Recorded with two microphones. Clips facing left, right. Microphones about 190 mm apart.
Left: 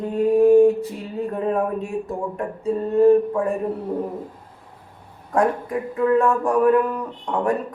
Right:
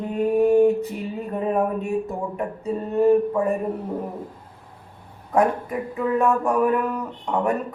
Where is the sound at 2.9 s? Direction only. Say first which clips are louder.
Left 3 dB; 5° right (ahead or behind).